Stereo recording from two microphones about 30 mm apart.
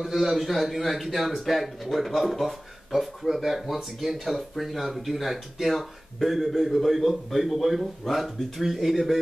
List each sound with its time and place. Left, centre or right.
0.0 s speech: centre